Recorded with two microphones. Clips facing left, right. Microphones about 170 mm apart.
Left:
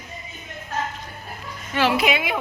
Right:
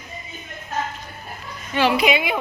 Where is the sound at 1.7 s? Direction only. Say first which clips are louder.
Right 2 dB; centre (ahead or behind).